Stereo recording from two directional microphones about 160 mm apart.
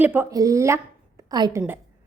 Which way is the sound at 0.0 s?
15° right (ahead or behind).